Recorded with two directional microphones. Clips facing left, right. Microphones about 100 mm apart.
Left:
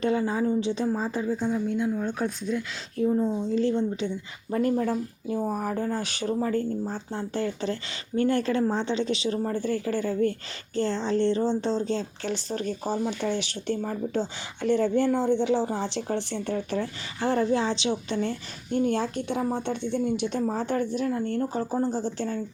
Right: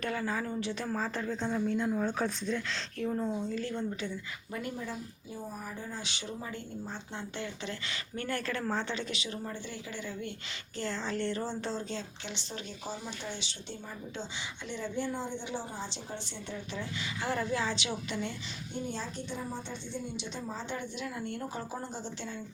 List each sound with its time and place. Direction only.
0.0 s speech: 25° left (ahead or behind); by 2.6 s 5° left (ahead or behind)
3.0 s speech: 15° left (ahead or behind)
4.8 s a woman's voice: 55° left (ahead or behind); by 7.8 s 35° left (ahead or behind)
8.1 s speech: 25° left (ahead or behind); by 10.3 s 45° left (ahead or behind)
10.8 s speech: 30° left (ahead or behind); by 16.8 s 55° left (ahead or behind)
16.8 s speech: 30° left (ahead or behind)
18.7 s a woman's voice: 60° left (ahead or behind); by 22.4 s 40° left (ahead or behind)